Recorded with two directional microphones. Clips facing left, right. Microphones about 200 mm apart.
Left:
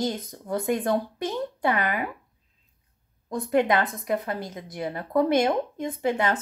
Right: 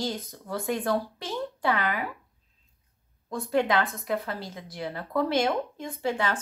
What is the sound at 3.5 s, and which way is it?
A woman's voice, 20° left (ahead or behind).